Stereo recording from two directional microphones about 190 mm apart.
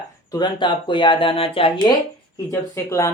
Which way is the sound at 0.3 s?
25° left (ahead or behind).